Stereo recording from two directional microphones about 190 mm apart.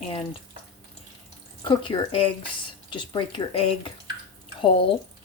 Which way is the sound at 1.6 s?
25° left (ahead or behind).